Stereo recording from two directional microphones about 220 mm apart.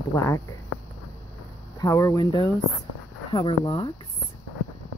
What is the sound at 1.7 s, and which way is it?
A woman's voice, 15° left (ahead or behind).